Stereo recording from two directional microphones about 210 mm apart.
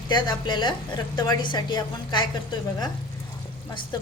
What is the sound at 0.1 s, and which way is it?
A woman's voice, 20° left (ahead or behind).